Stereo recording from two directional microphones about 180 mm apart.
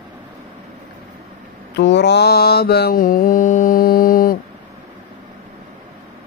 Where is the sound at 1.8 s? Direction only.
75° left (ahead or behind); by 4.4 s 50° left (ahead or behind).